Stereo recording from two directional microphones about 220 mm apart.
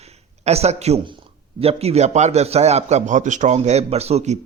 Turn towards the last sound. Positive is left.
turn(degrees=-30)  # may be behind; listen again after turning